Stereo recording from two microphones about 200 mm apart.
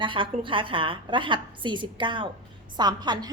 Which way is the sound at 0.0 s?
25° right (ahead or behind).